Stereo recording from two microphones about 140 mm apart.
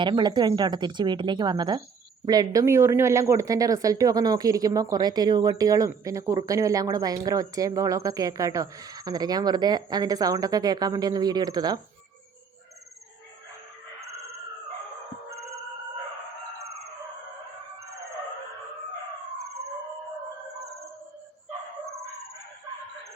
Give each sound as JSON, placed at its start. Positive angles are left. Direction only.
{"t": 0.0, "sound": "speech", "side_deg": -30}